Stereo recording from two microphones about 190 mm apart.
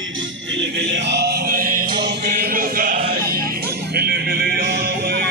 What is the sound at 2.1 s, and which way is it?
Chant, 55° right (ahead or behind).